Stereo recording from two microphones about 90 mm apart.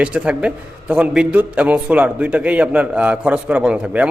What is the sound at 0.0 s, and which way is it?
A man's voice, 15° right (ahead or behind).